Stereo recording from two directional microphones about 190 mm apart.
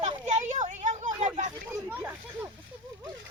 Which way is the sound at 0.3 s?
40° right (ahead or behind).